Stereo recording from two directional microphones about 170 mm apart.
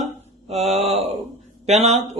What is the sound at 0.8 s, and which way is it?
Speech, 40° right (ahead or behind).